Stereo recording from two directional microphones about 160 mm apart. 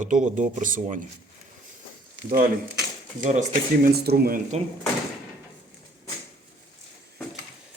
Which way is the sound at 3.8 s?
70° right (ahead or behind).